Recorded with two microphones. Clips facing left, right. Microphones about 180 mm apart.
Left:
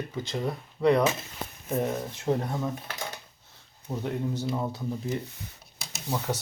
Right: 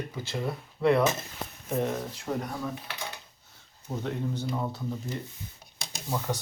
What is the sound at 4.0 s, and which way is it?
Speech, 10° left (ahead or behind).